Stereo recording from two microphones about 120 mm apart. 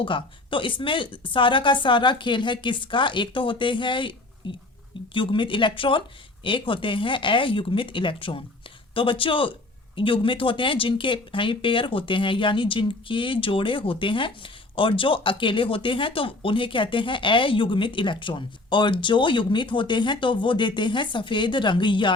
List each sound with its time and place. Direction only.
0.0 s speech: 45° left (ahead or behind)